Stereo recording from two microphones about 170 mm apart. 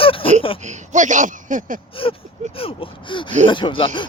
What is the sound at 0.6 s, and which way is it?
Speech, 45° right (ahead or behind).